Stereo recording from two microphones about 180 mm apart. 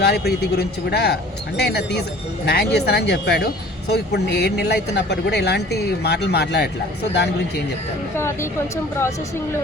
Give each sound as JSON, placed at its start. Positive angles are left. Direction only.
{"t": 0.0, "sound": "speech", "side_deg": 65}
{"t": 8.1, "sound": "a woman's voice", "side_deg": 15}